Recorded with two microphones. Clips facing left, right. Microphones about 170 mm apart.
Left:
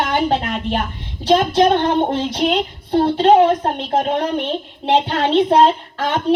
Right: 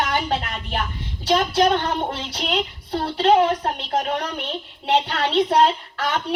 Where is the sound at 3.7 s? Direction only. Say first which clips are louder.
Left 5 dB; 45° left (ahead or behind).